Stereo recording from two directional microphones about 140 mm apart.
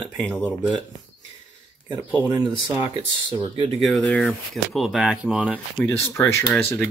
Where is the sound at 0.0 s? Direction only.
10° left (ahead or behind).